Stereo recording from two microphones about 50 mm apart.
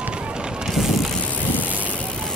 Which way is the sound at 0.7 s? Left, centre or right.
Centre.